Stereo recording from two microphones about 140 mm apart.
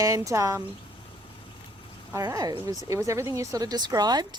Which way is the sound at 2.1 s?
25° right (ahead or behind).